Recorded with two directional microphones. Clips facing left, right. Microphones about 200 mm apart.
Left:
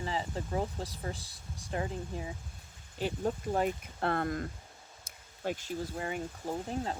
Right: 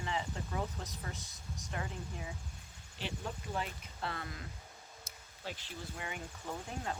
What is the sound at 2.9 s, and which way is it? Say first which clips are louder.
Speech: left 9 dB; 45° left (ahead or behind).